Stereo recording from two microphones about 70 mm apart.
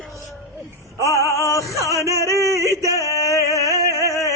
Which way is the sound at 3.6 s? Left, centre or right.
Right.